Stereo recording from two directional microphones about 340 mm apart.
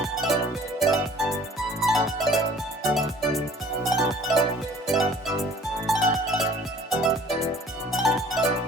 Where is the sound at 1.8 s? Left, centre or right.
Centre.